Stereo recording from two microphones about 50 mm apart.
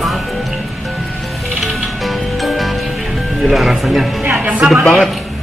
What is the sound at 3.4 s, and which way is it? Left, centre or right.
Speech, centre.